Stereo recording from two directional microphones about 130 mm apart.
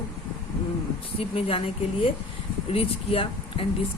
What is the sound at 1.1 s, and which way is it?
Speech, 50° left (ahead or behind).